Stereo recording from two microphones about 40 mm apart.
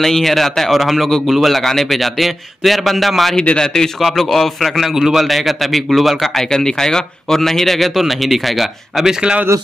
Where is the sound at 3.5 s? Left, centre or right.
Centre.